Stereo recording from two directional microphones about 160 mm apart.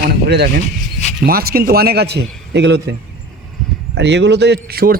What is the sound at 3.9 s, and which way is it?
A man's voice, 90° right.